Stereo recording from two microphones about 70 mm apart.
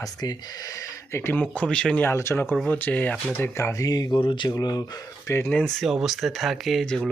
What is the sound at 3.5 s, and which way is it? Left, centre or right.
Speech, left.